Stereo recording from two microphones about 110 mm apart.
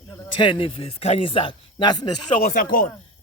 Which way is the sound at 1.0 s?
80° left.